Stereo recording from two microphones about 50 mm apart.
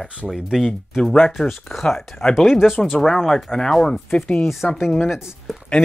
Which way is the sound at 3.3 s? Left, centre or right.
Centre.